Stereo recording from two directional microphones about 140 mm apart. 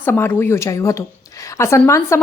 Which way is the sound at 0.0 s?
15° left (ahead or behind).